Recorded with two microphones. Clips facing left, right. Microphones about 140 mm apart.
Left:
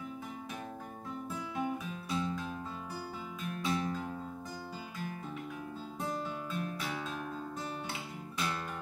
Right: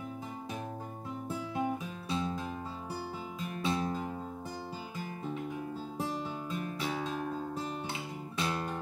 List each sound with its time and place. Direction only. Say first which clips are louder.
1.6 s music: right 1 dB; 25° right (ahead or behind)
3.6 s music: right 2 dB; 25° right (ahead or behind)
7.1 s guitar: right 4 dB; 30° right (ahead or behind)